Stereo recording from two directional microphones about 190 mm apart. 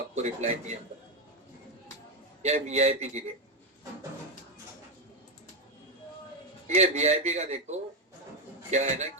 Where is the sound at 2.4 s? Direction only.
35° right (ahead or behind).